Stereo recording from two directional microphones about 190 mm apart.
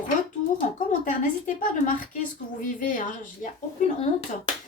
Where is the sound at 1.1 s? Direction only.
45° left (ahead or behind).